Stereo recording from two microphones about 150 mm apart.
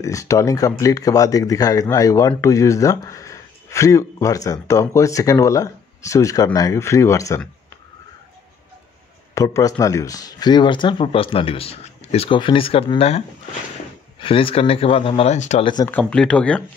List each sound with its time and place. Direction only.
0.0 s speech: 20° left (ahead or behind)
9.3 s speech: 20° left (ahead or behind); by 13.2 s 40° left (ahead or behind)
14.2 s speech: 35° left (ahead or behind)
15.6 s speech: 30° left (ahead or behind)
15.9 s speech: 5° left (ahead or behind)